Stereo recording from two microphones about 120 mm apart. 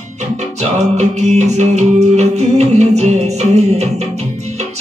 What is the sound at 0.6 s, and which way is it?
Music, 65° right (ahead or behind).